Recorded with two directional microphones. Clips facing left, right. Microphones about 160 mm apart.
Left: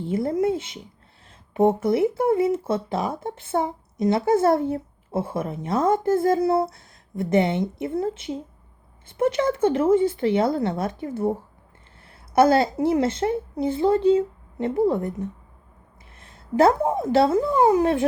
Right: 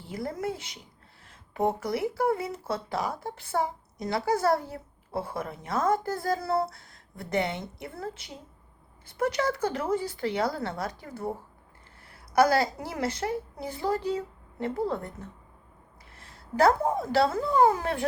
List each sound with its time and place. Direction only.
0.0 s a woman's voice: 25° left (ahead or behind)